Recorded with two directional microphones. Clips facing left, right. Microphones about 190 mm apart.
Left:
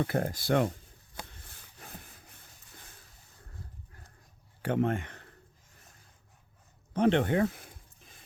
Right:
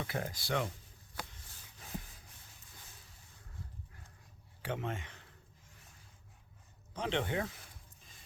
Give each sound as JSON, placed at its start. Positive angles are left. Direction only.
{"t": 0.0, "sound": "speech", "side_deg": 50}
{"t": 4.6, "sound": "speech", "side_deg": 55}
{"t": 6.9, "sound": "speech", "side_deg": 60}